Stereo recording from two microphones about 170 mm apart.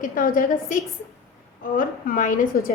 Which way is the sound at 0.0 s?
55° left (ahead or behind).